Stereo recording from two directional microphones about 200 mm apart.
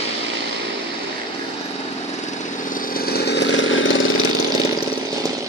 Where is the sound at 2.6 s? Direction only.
45° left (ahead or behind); by 4.0 s 70° left (ahead or behind).